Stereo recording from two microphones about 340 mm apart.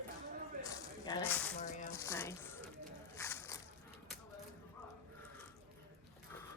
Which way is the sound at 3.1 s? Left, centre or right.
Centre.